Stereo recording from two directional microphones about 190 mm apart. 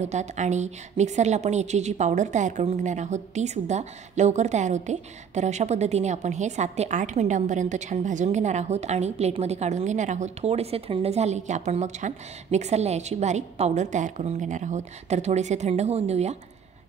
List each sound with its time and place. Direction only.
0.0 s a woman's voice: 40° right (ahead or behind)